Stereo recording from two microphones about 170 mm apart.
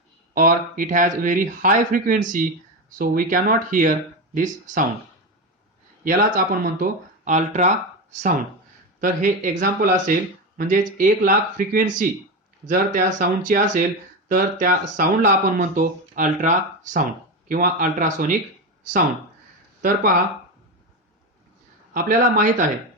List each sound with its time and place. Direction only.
0.3 s speech: 50° right (ahead or behind)
6.1 s speech: 55° right (ahead or behind)
19.8 s speech: 55° right (ahead or behind)
21.9 s speech: 50° right (ahead or behind)